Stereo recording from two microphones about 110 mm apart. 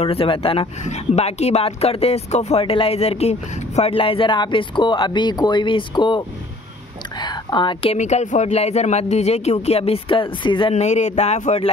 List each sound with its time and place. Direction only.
0.0 s speech: 60° left (ahead or behind); by 2.6 s 80° left
2.6 s speech: 55° left (ahead or behind)
7.2 s whispering: 45° left (ahead or behind)
7.9 s speech: 90° left; by 10.7 s 50° left (ahead or behind)
10.7 s speech: 90° left